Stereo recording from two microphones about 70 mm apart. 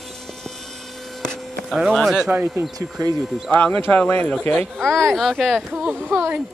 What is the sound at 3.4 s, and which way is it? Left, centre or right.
Speech, centre.